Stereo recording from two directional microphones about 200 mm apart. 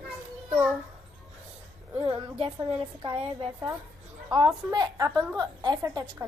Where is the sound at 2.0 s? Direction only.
30° right (ahead or behind).